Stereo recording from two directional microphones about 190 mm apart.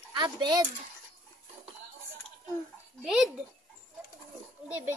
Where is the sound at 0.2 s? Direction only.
20° right (ahead or behind).